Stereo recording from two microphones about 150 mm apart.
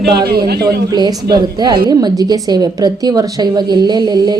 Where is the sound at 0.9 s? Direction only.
30° right (ahead or behind).